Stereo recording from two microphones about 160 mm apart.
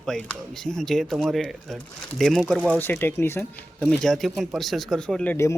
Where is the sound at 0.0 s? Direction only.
5° left (ahead or behind).